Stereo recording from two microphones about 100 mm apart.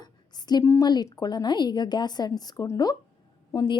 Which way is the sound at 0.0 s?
45° left (ahead or behind).